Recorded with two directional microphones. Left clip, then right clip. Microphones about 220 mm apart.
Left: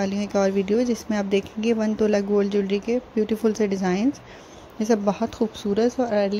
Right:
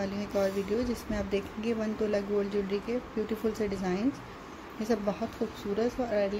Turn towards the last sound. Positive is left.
turn(degrees=35)  # may be behind; listen again after turning